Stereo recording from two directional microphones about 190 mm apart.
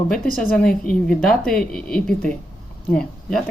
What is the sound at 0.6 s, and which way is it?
Speech, 50° left (ahead or behind).